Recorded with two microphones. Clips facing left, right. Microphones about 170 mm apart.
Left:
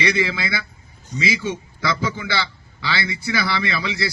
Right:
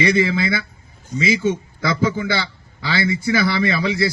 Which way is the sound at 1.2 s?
45° right (ahead or behind).